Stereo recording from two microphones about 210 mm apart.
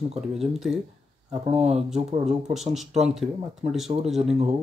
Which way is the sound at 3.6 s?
Centre (ahead or behind).